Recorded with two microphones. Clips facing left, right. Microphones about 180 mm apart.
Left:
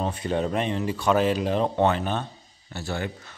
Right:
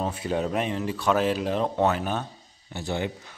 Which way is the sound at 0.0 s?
5° right (ahead or behind).